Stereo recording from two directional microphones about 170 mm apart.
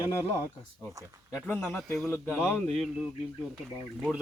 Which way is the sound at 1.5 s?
5° left (ahead or behind).